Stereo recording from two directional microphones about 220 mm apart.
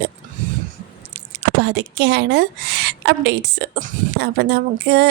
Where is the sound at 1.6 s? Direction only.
50° right (ahead or behind).